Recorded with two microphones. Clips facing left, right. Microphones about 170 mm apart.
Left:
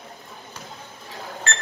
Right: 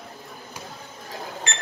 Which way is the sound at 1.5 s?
15° right (ahead or behind).